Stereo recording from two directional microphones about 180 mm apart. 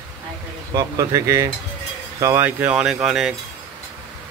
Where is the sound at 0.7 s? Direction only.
20° right (ahead or behind); by 3.3 s centre (ahead or behind).